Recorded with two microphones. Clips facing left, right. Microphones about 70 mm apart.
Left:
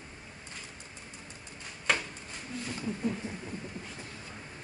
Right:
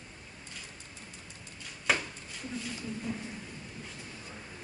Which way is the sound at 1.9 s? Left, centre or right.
Centre.